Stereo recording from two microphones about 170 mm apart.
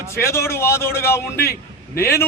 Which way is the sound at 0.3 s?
15° left (ahead or behind).